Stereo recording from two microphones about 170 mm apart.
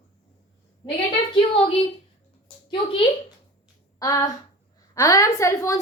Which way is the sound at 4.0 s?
20° left (ahead or behind).